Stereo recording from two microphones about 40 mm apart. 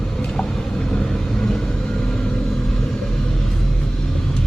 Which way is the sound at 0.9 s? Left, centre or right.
Centre.